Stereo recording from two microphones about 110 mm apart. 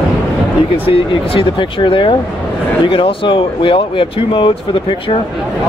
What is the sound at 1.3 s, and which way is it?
Speech, 50° left (ahead or behind).